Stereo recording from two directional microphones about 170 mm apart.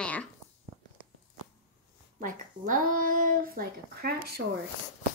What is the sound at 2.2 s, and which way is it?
Speech, 55° right (ahead or behind).